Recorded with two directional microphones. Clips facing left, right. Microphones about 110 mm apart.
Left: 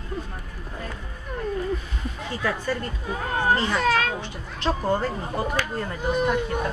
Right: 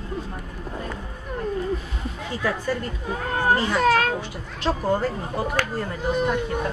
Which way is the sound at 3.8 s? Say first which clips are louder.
Right 3 dB; 50° right (ahead or behind).